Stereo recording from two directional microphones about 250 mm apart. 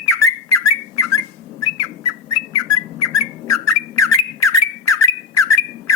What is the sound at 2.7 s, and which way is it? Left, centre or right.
Whistling, left.